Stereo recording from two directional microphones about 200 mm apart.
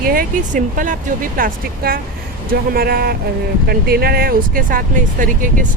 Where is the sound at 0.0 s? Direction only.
45° right (ahead or behind).